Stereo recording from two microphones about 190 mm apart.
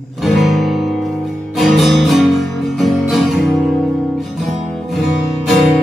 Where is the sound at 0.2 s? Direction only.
Centre (ahead or behind).